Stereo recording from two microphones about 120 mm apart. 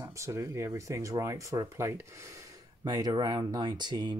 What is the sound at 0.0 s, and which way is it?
Speech, 25° right (ahead or behind).